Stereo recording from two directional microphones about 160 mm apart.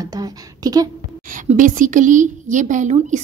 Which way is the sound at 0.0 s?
25° right (ahead or behind).